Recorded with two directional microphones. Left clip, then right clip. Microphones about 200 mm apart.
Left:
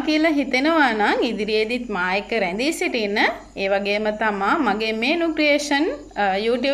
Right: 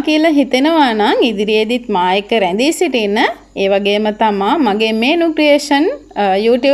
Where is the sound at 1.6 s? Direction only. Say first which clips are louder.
Right 9 dB; 40° right (ahead or behind).